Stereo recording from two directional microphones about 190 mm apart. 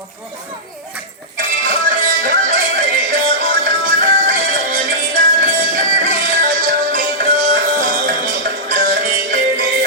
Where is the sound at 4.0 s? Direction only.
45° right (ahead or behind).